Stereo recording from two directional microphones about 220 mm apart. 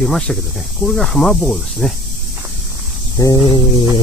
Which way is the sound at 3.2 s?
20° left (ahead or behind).